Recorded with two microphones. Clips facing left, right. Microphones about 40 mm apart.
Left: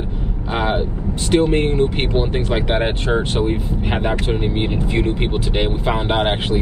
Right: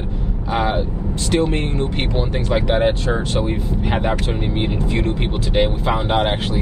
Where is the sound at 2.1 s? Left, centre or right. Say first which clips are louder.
Even; left.